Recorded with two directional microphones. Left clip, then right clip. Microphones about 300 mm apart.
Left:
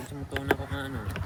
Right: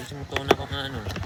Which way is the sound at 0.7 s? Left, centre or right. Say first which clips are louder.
Right 4 dB; right.